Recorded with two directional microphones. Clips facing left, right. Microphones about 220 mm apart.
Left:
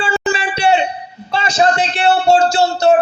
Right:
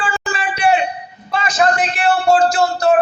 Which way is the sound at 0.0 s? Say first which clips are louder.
Left 4 dB; 25° left (ahead or behind).